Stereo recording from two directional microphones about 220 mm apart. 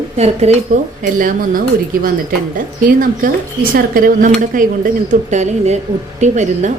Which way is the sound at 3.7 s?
40° right (ahead or behind).